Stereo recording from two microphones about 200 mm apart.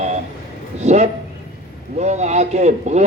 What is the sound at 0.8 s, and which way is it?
A man's voice, 35° right (ahead or behind).